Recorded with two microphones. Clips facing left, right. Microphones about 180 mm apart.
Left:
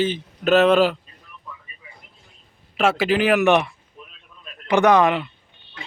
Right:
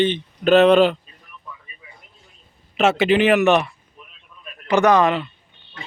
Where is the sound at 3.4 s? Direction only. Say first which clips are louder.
Right 1 dB; 15° left (ahead or behind).